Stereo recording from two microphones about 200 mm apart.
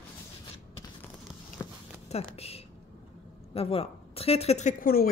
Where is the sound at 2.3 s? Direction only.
30° left (ahead or behind).